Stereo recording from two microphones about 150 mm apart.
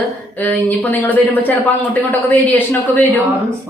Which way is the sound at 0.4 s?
10° left (ahead or behind).